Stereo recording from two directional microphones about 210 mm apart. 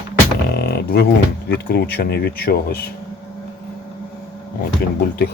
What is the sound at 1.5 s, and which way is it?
Speech, 50° left (ahead or behind).